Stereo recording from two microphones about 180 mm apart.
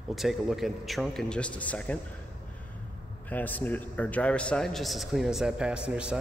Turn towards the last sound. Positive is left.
turn(degrees=-5)  # may be behind; listen again after turning